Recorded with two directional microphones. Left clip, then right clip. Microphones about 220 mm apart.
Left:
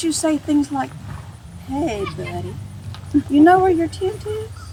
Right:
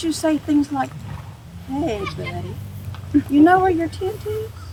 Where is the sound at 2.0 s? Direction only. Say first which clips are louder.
Left 1 dB; 55° right (ahead or behind).